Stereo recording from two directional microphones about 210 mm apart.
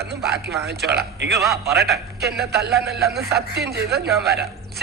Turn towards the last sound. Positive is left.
turn(degrees=-50)  # may be behind; listen again after turning